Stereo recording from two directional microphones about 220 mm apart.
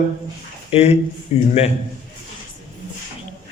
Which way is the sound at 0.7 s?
30° left (ahead or behind).